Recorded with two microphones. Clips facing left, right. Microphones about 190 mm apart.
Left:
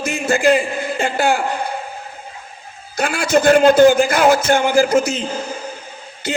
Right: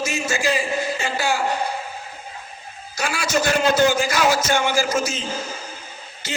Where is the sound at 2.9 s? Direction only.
60° left (ahead or behind).